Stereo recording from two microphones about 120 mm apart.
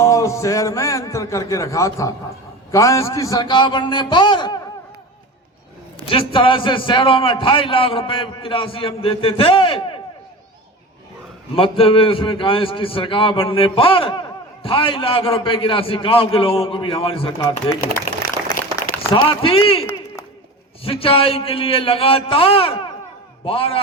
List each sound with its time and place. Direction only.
0.0 s a man's voice: 25° left (ahead or behind)
3.4 s speech: 40° left (ahead or behind)
6.1 s a man's voice: 45° left (ahead or behind)
11.5 s a man's voice: 50° left (ahead or behind)
18.8 s a sound: 30° left (ahead or behind)
19.1 s a man's voice: 45° left (ahead or behind)